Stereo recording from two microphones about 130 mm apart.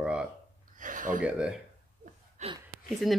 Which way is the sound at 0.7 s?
90° right.